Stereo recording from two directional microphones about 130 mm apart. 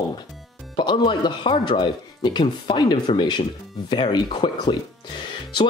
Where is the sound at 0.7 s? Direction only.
35° left (ahead or behind).